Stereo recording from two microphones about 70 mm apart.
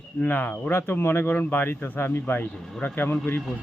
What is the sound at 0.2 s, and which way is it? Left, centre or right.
Speech, left.